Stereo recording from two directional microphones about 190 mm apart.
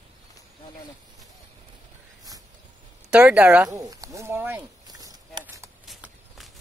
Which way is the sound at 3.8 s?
20° right (ahead or behind).